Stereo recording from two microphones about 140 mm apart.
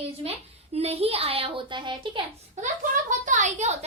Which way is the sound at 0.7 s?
45° right (ahead or behind).